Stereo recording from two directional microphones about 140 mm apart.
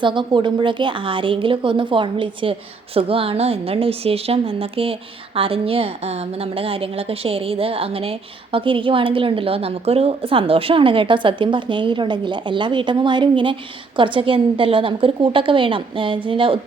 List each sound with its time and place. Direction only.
0.0 s a woman's voice: 35° right (ahead or behind)